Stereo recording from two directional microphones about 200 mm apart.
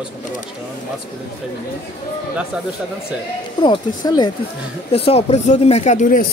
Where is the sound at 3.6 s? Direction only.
25° left (ahead or behind).